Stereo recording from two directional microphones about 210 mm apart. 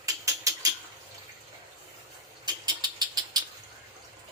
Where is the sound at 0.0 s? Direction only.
15° right (ahead or behind).